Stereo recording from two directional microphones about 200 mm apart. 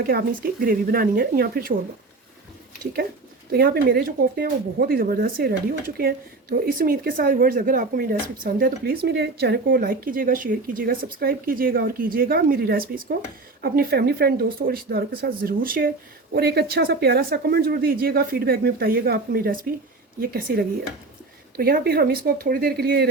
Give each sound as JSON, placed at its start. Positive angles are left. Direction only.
{"t": 0.0, "sound": "speech", "side_deg": -50}
{"t": 3.5, "sound": "speech", "side_deg": -50}